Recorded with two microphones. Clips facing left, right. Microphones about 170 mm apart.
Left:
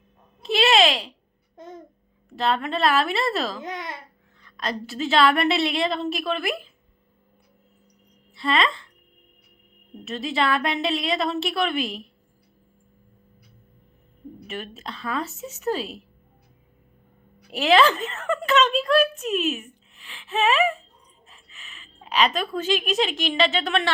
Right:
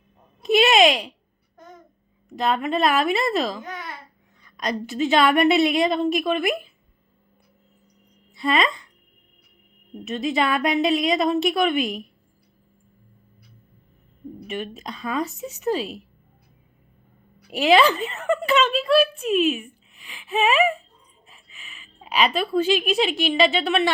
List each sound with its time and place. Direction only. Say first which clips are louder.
0.4 s a sound: right 3 dB; 15° right (ahead or behind)
2.3 s a woman's voice: right 2 dB; 15° right (ahead or behind)
3.6 s speech: left 2 dB; 20° left (ahead or behind)
4.4 s a woman's voice: right 3 dB; 15° right (ahead or behind)
8.4 s speech: right 1 dB; 15° right (ahead or behind)
10.0 s a woman's voice: right 2 dB; 15° right (ahead or behind)
14.7 s a woman's voice: right 2 dB; 15° right (ahead or behind)
17.5 s a woman's voice: right 1 dB; 10° right (ahead or behind)